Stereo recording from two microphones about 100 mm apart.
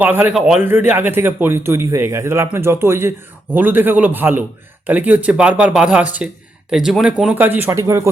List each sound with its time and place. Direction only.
0.0 s speech: 15° right (ahead or behind)
7.3 s speech: 20° right (ahead or behind)